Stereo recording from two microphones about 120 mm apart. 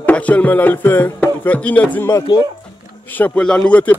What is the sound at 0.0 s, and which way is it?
A man's voice, 10° left (ahead or behind).